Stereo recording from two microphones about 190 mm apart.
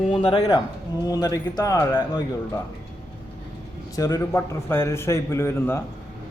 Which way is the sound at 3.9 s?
15° left (ahead or behind).